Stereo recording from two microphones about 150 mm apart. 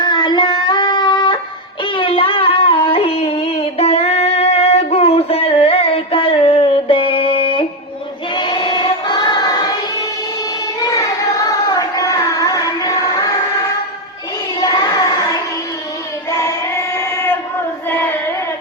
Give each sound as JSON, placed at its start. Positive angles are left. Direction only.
{"t": 0.0, "sound": "music", "side_deg": 30}
{"t": 1.8, "sound": "a sound", "side_deg": 35}
{"t": 8.4, "sound": "choir", "side_deg": 30}
{"t": 10.9, "sound": "a sound", "side_deg": 25}
{"t": 14.6, "sound": "child singing", "side_deg": 25}
{"t": 17.8, "sound": "carnatic music", "side_deg": 15}